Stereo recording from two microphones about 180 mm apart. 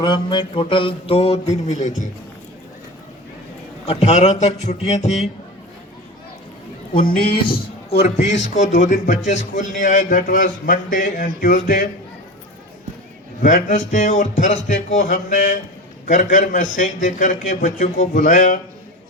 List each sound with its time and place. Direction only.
0.0 s mantra: 25° left (ahead or behind)
3.8 s a man's voice: 35° left (ahead or behind)
7.0 s speech: 55° left (ahead or behind)
8.0 s a man's voice: 40° left (ahead or behind)
13.4 s a man's voice: 45° left (ahead or behind)